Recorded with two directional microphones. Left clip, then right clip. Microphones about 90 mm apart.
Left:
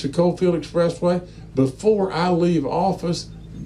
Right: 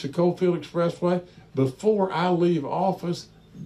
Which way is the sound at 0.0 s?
20° right (ahead or behind).